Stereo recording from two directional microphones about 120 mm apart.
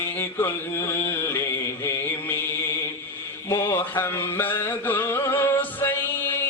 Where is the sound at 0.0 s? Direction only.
20° left (ahead or behind).